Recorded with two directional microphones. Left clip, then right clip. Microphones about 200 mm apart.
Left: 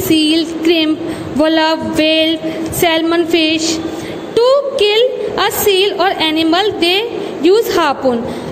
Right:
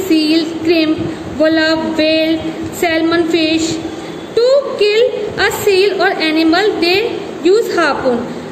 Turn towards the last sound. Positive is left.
turn(degrees=35)  # may be behind; listen again after turning